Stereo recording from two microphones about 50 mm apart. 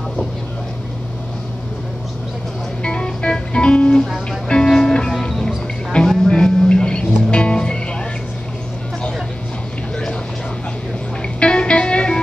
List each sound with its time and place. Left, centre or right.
2.8 s music: centre
11.3 s music: left